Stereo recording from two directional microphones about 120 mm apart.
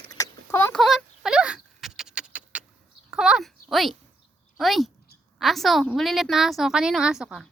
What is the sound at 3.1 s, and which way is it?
A woman's voice, 5° right (ahead or behind).